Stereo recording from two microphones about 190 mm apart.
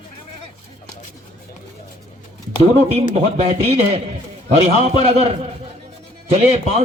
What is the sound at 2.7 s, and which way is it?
A man's voice, 35° right (ahead or behind).